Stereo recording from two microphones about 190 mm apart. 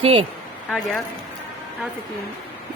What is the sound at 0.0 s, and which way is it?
Speech, 30° right (ahead or behind).